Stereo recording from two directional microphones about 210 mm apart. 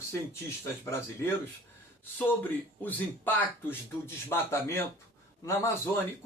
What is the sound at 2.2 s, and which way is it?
Speech, 10° left (ahead or behind).